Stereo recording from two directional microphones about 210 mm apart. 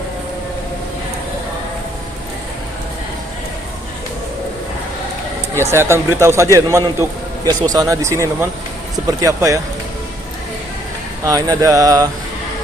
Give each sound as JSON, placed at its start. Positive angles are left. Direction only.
{"t": 5.5, "sound": "speech", "side_deg": -10}
{"t": 11.3, "sound": "speech", "side_deg": -15}